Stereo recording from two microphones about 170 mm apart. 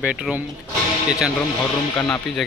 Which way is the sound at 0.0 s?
5° right (ahead or behind).